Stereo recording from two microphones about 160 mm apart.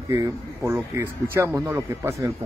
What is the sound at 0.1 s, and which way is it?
Speech, 15° right (ahead or behind).